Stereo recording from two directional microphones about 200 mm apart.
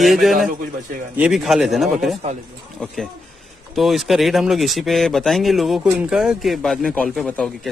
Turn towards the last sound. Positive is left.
turn(degrees=5)  # may be behind; listen again after turning